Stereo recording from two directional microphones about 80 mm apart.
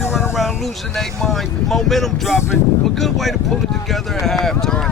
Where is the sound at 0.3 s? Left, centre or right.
Centre.